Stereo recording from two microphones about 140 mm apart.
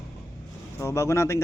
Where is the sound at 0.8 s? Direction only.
20° left (ahead or behind).